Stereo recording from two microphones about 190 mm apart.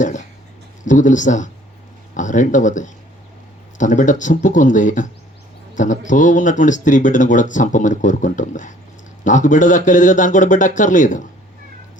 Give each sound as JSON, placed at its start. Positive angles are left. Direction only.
{"t": 0.9, "sound": "speech", "side_deg": 40}